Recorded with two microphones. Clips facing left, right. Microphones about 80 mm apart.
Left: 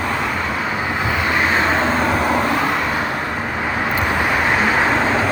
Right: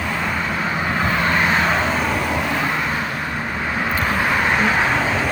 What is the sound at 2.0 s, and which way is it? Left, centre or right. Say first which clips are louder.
Vehicle: left 4 dB; left.